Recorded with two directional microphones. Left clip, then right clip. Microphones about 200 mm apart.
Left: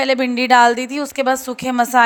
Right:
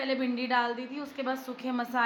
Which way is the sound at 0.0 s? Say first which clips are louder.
Left 14 dB; 50° left (ahead or behind).